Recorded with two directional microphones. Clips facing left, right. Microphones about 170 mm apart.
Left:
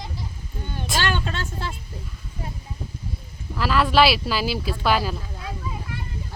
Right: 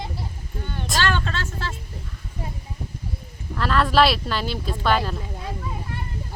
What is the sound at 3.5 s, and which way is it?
Speech, 5° left (ahead or behind).